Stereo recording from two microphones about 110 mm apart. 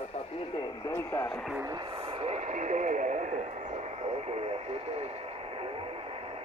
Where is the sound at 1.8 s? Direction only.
50° right (ahead or behind).